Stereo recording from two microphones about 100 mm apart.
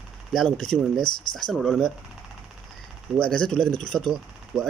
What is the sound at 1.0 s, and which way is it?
Speech, 50° left (ahead or behind).